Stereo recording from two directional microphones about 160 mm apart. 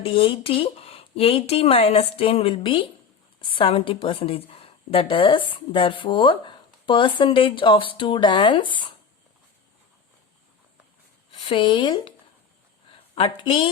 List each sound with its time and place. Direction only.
0.0 s a woman's voice: 35° left (ahead or behind)
11.4 s a woman's voice: 30° left (ahead or behind)
13.1 s a woman's voice: 30° left (ahead or behind)